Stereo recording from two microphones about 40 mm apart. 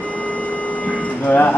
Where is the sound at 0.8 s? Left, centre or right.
Left.